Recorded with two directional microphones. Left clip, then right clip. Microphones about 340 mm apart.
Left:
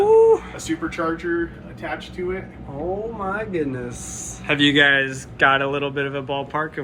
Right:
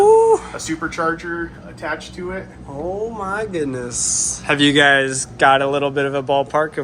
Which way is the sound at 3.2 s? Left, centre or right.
Centre.